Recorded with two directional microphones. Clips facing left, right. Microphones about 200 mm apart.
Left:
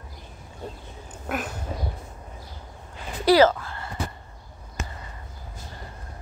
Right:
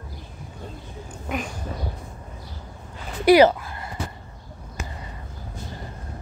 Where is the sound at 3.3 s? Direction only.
15° right (ahead or behind).